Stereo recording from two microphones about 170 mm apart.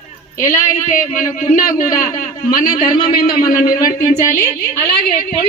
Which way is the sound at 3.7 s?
20° left (ahead or behind).